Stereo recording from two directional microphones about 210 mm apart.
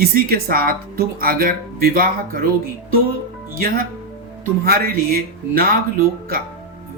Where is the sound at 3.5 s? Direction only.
45° right (ahead or behind).